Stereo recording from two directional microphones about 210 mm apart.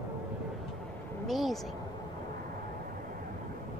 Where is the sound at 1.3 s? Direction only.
Centre (ahead or behind).